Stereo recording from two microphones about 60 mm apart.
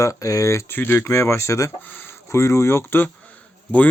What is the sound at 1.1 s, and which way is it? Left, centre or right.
Speech, left.